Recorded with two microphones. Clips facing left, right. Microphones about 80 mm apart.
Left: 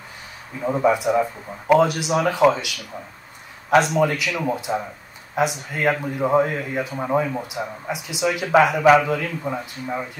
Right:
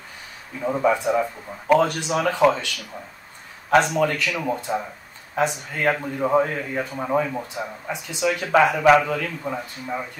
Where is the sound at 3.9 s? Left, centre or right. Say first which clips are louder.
Left 2 dB; centre.